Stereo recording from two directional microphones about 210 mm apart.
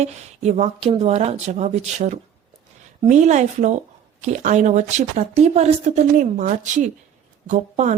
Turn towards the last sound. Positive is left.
turn(degrees=-35)  # may be behind; listen again after turning